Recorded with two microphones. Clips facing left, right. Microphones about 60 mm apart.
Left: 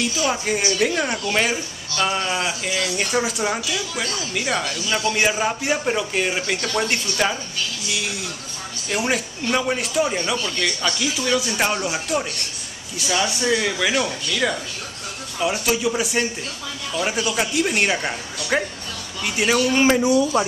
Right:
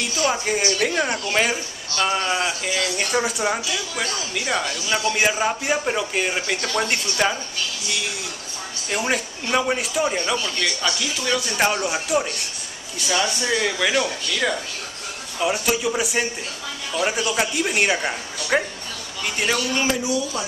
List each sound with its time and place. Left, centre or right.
0.3 s speech: centre
8.9 s speech: centre
19.2 s speech: centre
19.7 s speech: left